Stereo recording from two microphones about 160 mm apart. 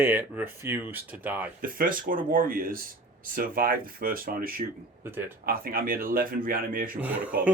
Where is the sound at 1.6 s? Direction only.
60° right (ahead or behind).